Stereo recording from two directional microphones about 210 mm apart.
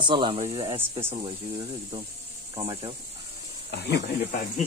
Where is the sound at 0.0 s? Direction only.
25° right (ahead or behind).